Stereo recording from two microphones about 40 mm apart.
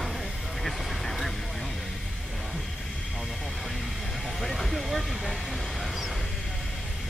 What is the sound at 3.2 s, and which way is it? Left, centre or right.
Vehicle, centre.